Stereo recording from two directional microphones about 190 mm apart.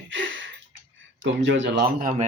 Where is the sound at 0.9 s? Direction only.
80° right; by 2.2 s 45° right (ahead or behind).